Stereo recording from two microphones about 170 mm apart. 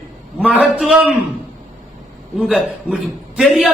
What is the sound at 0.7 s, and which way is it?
Speech, 5° right (ahead or behind).